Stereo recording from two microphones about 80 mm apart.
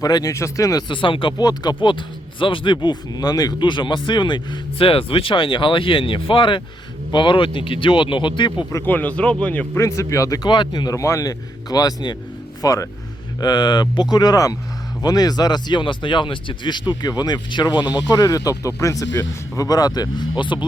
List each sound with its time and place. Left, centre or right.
0.0 s speech: left
0.3 s speech: left
0.8 s speech: left
1.4 s speech: left
1.8 s speech: left
3.6 s speech: left
5.0 s speech: left
8.8 s speech: left
9.7 s speech: left
10.5 s speech: left
10.9 s speech: left
13.4 s speech: left
16.9 s speech: left